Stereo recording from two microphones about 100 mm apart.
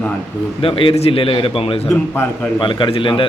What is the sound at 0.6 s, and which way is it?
A man's voice, 65° left (ahead or behind).